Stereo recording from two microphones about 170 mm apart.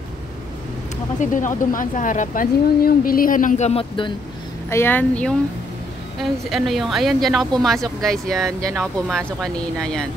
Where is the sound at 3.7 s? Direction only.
30° left (ahead or behind).